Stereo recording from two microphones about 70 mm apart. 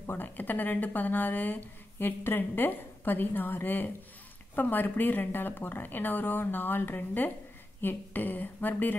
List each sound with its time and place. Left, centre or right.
0.0 s speech: left